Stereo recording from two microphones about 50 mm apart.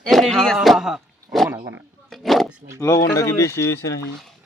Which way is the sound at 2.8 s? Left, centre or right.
Left.